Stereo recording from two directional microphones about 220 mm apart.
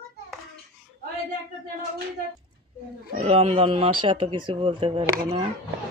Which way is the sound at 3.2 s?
25° right (ahead or behind).